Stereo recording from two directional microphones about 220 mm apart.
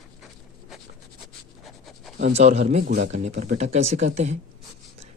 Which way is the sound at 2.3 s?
30° right (ahead or behind).